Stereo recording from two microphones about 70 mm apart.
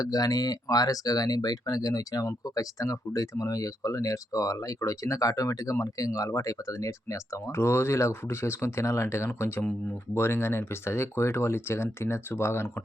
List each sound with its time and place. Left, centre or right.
0.0 s speech: left